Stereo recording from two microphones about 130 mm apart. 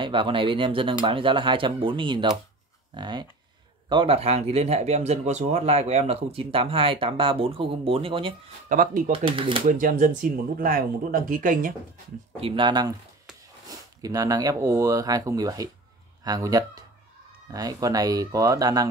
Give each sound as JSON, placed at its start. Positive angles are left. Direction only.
{"t": 0.0, "sound": "speech", "side_deg": -40}
{"t": 8.6, "sound": "speech", "side_deg": -90}
{"t": 9.1, "sound": "speech", "side_deg": -45}
{"t": 9.7, "sound": "speech", "side_deg": -90}
{"t": 12.4, "sound": "speech", "side_deg": -40}